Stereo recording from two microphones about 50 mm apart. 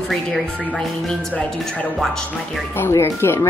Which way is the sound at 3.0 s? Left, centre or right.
Left.